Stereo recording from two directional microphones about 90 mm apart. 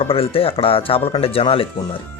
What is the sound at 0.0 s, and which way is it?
Speech, 90° left.